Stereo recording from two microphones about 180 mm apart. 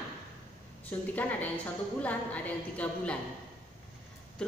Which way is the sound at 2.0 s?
10° left (ahead or behind).